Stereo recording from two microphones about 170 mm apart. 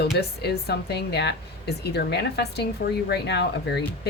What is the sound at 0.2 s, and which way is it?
Speech, 70° left (ahead or behind).